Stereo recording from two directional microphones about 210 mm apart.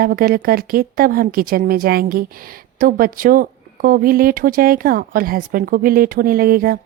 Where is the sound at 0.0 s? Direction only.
45° right (ahead or behind).